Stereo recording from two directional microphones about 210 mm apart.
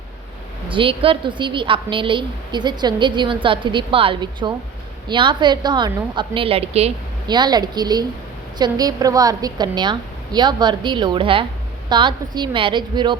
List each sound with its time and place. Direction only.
0.7 s a woman's voice: 25° right (ahead or behind)